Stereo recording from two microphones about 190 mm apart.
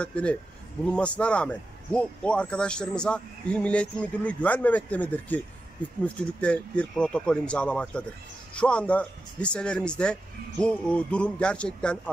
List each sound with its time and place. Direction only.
0.0 s speech: 5° left (ahead or behind)